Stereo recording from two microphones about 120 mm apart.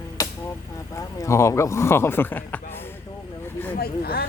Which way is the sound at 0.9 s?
25° left (ahead or behind).